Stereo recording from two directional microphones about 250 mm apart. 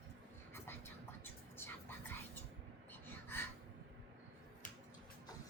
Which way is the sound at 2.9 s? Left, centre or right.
Centre.